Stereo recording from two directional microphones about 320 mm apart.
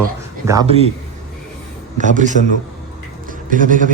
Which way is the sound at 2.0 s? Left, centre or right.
Right.